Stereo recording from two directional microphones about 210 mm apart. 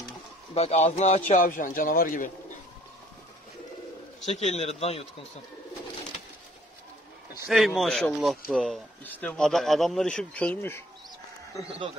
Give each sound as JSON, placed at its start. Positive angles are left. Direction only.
{"t": 0.6, "sound": "speech", "side_deg": 30}
{"t": 4.3, "sound": "speech", "side_deg": 30}
{"t": 7.4, "sound": "speech", "side_deg": 0}